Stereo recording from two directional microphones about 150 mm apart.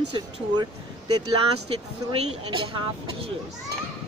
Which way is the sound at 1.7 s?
35° right (ahead or behind).